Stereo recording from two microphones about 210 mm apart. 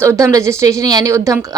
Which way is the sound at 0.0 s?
15° right (ahead or behind).